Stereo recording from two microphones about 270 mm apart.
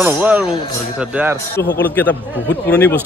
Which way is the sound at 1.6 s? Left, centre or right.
Left.